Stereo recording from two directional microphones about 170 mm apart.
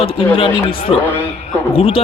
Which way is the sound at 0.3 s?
30° left (ahead or behind).